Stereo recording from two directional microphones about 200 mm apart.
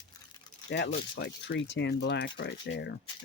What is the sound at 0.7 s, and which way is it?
Speech, 60° left (ahead or behind).